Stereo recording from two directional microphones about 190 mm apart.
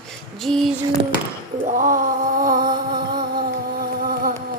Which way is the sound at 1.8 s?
45° right (ahead or behind).